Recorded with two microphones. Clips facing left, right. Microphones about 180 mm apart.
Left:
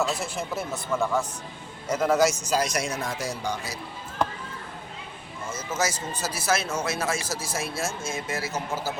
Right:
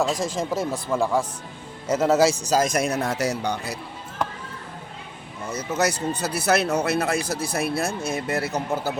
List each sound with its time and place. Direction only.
0.2 s speech: 90° right
0.7 s speech: 30° right (ahead or behind); by 3.8 s 65° right (ahead or behind)
5.5 s speech: 65° right (ahead or behind)